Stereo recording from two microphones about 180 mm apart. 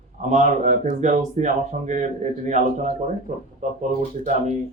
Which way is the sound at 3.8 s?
40° right (ahead or behind).